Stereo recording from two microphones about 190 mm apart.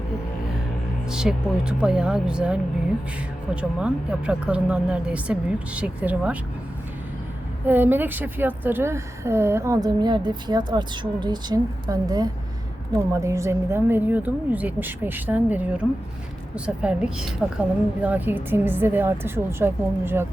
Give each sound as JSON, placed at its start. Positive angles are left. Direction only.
{"t": 1.1, "sound": "speech", "side_deg": -5}
{"t": 7.7, "sound": "a woman's voice", "side_deg": -10}